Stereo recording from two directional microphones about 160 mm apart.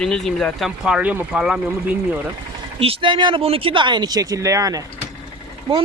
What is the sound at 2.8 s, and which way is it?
Speech, 35° right (ahead or behind).